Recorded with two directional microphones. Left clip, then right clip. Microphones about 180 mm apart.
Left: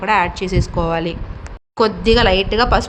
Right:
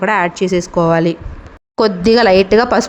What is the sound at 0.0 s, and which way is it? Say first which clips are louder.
A woman's voice: right 2 dB; 25° right (ahead or behind).